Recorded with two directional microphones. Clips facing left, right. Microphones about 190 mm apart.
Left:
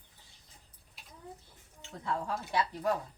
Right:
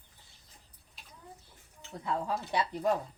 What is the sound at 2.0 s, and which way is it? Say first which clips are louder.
Speech: right 2 dB; 20° right (ahead or behind).